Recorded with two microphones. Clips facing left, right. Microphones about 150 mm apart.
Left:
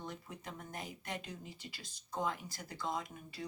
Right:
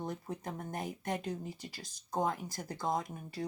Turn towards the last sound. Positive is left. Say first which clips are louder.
# right 6 dB
turn(degrees=-45)  # may be behind; listen again after turning